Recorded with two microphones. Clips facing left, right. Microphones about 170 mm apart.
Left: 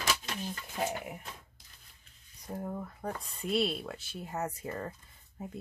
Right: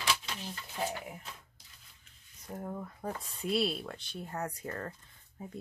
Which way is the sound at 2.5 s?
5° left (ahead or behind).